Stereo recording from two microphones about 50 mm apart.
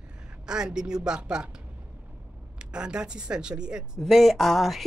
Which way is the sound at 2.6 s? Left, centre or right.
Centre.